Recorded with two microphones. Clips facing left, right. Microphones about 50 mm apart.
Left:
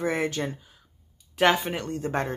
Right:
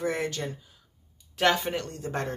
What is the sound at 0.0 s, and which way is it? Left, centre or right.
Speech, left.